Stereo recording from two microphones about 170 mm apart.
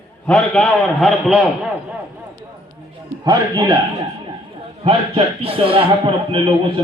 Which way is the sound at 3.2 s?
25° right (ahead or behind).